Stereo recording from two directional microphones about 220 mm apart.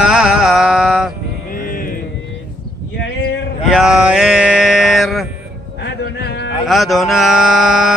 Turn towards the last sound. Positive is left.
turn(degrees=0)  # may be behind; listen again after turning